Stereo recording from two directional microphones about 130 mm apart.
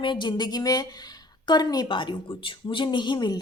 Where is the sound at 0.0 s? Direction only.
35° left (ahead or behind).